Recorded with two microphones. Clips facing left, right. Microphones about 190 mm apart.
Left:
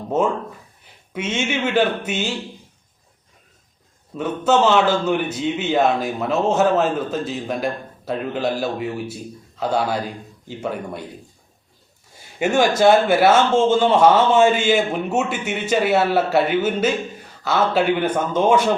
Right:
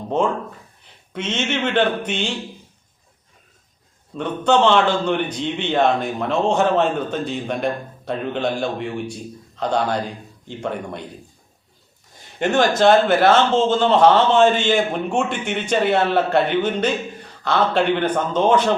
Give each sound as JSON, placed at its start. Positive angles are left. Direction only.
{"t": 0.1, "sound": "a man's voice", "side_deg": 5}
{"t": 4.1, "sound": "a man's voice", "side_deg": 5}
{"t": 12.4, "sound": "a man's voice", "side_deg": 10}